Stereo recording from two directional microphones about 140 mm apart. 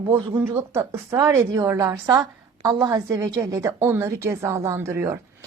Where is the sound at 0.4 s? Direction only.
15° right (ahead or behind).